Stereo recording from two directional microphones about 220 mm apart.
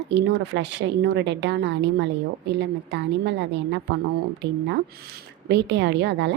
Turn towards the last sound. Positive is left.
turn(degrees=-50)  # may be behind; listen again after turning